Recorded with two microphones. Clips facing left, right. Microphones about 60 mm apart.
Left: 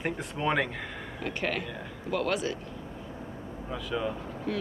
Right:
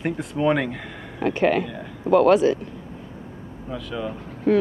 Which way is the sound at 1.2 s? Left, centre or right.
Right.